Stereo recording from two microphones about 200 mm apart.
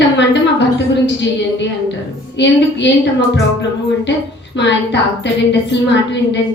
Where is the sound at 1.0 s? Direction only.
60° left (ahead or behind).